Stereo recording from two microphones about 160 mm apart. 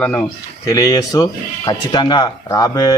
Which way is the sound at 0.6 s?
20° left (ahead or behind).